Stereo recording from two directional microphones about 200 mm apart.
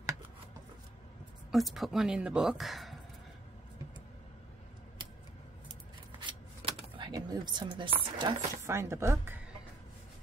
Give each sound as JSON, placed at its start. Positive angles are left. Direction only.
{"t": 1.5, "sound": "speech", "side_deg": 0}
{"t": 6.1, "sound": "a sound", "side_deg": -25}
{"t": 8.6, "sound": "speech", "side_deg": -15}